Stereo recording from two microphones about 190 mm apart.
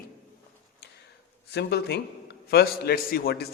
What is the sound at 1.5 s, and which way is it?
A man's voice, 60° left (ahead or behind).